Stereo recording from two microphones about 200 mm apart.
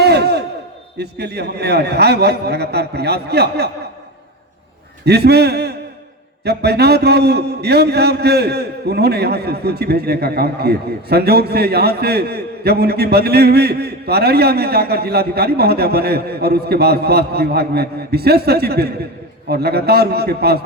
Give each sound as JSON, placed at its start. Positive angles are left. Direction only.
{"t": 0.0, "sound": "a sound", "side_deg": -55}
{"t": 0.9, "sound": "a man's voice", "side_deg": -55}
{"t": 5.0, "sound": "a man's voice", "side_deg": -55}